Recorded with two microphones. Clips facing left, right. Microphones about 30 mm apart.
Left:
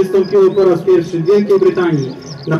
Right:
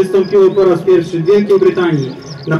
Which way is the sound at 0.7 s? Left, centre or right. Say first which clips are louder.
Right 1 dB; right.